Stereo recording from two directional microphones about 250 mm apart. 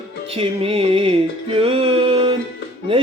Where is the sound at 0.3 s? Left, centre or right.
Right.